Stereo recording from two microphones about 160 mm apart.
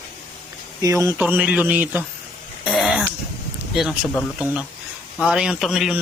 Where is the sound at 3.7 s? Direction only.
5° right (ahead or behind).